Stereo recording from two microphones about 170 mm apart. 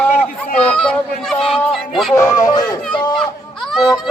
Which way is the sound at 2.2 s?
20° left (ahead or behind).